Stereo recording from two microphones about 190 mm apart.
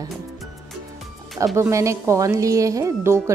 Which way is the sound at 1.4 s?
15° right (ahead or behind).